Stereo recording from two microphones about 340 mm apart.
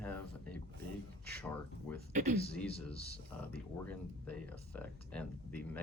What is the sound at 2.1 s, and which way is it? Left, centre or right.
Speech, right.